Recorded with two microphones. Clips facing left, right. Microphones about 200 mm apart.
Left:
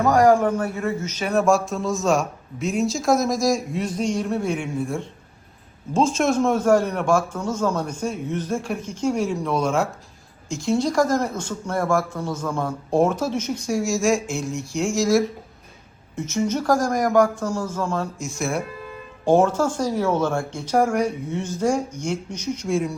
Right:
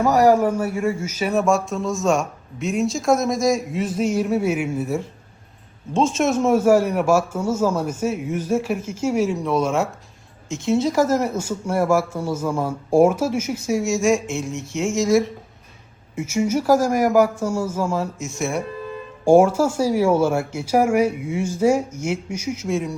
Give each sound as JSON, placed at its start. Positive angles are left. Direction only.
{"t": 0.0, "sound": "speech", "side_deg": -5}
{"t": 19.2, "sound": "speech", "side_deg": -10}